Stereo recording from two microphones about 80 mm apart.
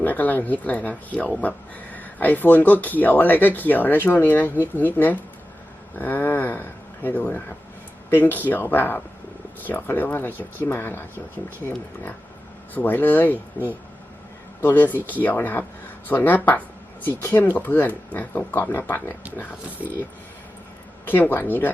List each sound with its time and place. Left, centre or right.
0.0 s speech: left
12.7 s speech: left
14.6 s speech: left